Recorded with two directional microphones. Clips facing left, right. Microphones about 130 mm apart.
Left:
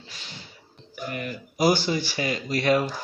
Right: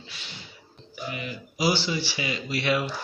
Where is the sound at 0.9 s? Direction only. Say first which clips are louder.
Left 2 dB; 50° left (ahead or behind).